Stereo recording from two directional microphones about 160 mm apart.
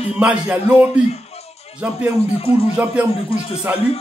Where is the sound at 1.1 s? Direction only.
40° left (ahead or behind).